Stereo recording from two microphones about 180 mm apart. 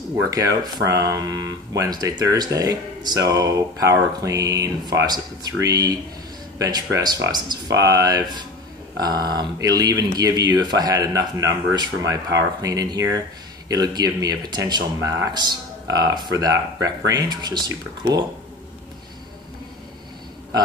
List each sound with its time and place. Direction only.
0.1 s speech: 20° right (ahead or behind)
7.2 s speech: 25° right (ahead or behind)